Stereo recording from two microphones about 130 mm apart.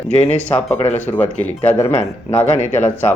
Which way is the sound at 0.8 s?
55° left (ahead or behind).